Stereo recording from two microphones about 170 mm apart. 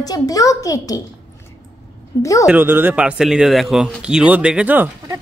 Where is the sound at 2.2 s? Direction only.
20° left (ahead or behind).